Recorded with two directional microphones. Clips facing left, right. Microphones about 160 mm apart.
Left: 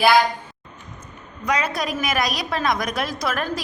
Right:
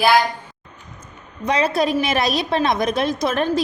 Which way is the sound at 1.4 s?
30° right (ahead or behind).